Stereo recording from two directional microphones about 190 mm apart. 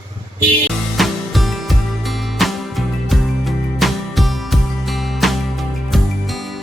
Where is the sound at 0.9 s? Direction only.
Centre (ahead or behind).